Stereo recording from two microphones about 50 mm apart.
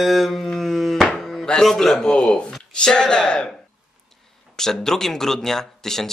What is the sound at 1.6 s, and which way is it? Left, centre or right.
Speech, centre.